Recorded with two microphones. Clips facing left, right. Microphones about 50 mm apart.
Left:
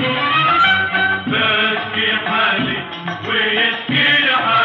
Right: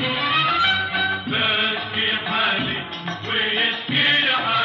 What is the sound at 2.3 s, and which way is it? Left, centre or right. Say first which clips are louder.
Music: left 5 dB; left.